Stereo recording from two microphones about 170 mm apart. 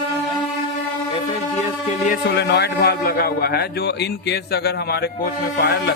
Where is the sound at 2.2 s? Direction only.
80° left.